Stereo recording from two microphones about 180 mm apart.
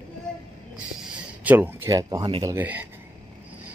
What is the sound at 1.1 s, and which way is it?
Speech, 10° right (ahead or behind).